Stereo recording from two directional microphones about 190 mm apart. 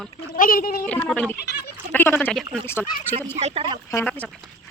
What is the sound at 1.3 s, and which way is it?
Goat, 60° left (ahead or behind).